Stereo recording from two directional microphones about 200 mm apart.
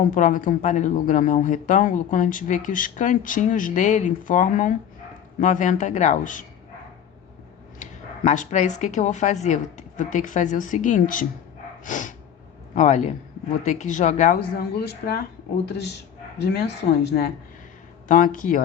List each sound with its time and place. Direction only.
0.0 s speech: 40° left (ahead or behind)
7.8 s speech: 35° left (ahead or behind)
14.6 s a woman's voice: 50° left (ahead or behind)
16.4 s speech: 55° left (ahead or behind)
18.1 s a woman's voice: 40° left (ahead or behind)